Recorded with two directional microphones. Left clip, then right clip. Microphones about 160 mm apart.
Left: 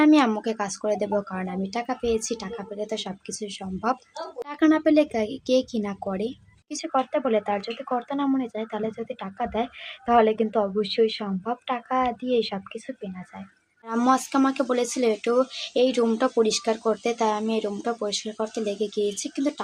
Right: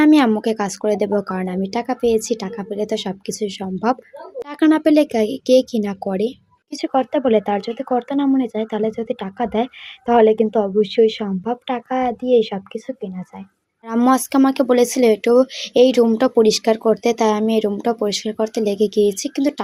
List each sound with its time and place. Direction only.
0.0 s a woman's voice: 35° right (ahead or behind)
13.8 s speech: 35° right (ahead or behind)